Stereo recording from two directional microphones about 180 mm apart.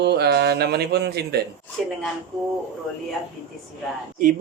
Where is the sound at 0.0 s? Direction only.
65° right (ahead or behind).